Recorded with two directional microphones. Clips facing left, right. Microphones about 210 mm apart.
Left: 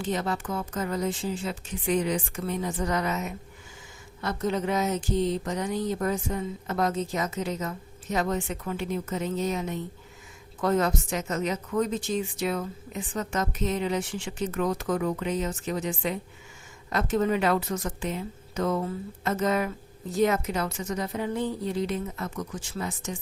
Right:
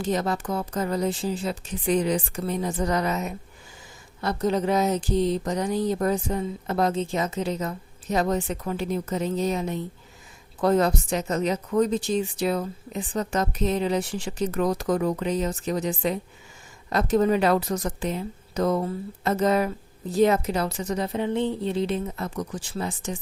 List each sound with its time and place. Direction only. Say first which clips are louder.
0.0 s speech: right 3 dB; 40° right (ahead or behind)